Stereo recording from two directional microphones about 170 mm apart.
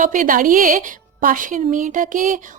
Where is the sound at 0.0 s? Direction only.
50° right (ahead or behind).